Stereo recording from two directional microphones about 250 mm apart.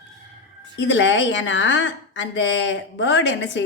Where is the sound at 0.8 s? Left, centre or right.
Left.